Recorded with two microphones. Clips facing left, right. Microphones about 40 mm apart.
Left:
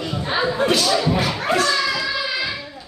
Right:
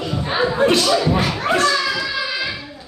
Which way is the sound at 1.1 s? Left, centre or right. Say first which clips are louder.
Right 1 dB; right.